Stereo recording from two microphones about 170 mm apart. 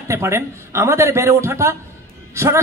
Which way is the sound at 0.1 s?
15° right (ahead or behind).